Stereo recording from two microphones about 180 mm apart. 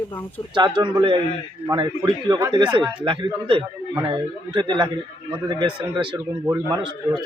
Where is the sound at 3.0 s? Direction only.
25° right (ahead or behind).